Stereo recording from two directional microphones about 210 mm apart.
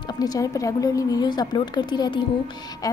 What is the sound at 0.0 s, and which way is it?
A woman's voice, 20° left (ahead or behind).